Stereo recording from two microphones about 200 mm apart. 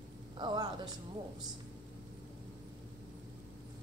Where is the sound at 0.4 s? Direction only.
20° right (ahead or behind).